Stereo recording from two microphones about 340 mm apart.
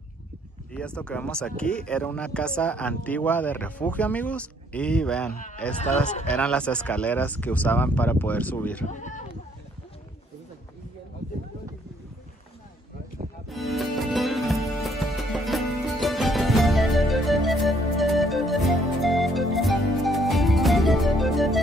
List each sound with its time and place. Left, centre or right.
0.7 s speech: centre
5.3 s speech: left
5.6 s speech: centre
8.9 s a sound: left
13.5 s music: centre